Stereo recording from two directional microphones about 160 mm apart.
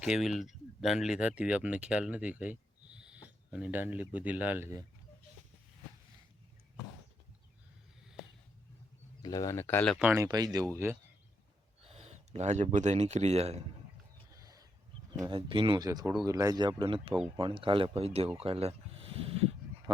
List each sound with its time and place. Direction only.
0.0 s speech: 5° right (ahead or behind)
9.2 s speech: 25° left (ahead or behind)
10.1 s speech: 20° right (ahead or behind)
11.8 s speech: 40° right (ahead or behind)
14.3 s a sound: 20° right (ahead or behind)
15.3 s speech: 30° right (ahead or behind)